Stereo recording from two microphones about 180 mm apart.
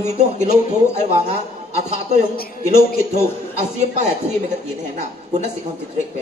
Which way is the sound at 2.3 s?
55° left (ahead or behind).